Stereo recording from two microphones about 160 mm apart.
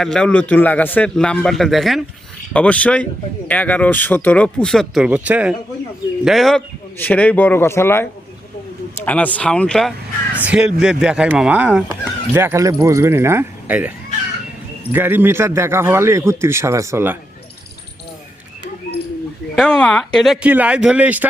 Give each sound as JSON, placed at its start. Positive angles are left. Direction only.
{"t": 0.0, "sound": "a man's voice", "side_deg": 5}
{"t": 5.0, "sound": "a man's voice", "side_deg": -10}
{"t": 9.0, "sound": "speech", "side_deg": 10}
{"t": 10.3, "sound": "a man's voice", "side_deg": -10}
{"t": 14.9, "sound": "a man's voice", "side_deg": -10}
{"t": 19.5, "sound": "a man's voice", "side_deg": 5}